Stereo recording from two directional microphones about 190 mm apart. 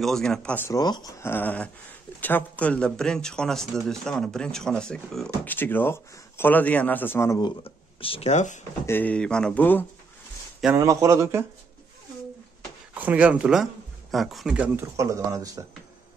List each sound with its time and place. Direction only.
0.0 s speech: 5° left (ahead or behind); by 8.5 s 35° left (ahead or behind)
8.8 s speech: 10° left (ahead or behind)
10.6 s speech: 15° right (ahead or behind)
12.9 s speech: 10° right (ahead or behind)
15.0 s speech: 15° right (ahead or behind)